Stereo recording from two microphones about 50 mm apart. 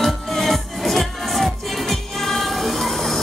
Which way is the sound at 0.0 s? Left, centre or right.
Centre.